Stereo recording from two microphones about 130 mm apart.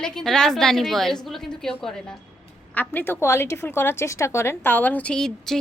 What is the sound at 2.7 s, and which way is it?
A woman's voice, 15° left (ahead or behind).